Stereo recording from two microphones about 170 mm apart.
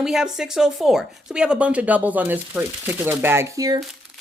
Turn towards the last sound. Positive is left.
turn(degrees=-20)  # may be behind; listen again after turning